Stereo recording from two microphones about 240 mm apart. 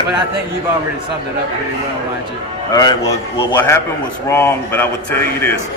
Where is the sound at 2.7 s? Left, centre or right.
Centre.